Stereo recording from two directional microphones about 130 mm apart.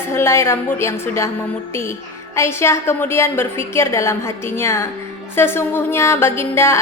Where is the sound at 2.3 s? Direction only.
20° left (ahead or behind).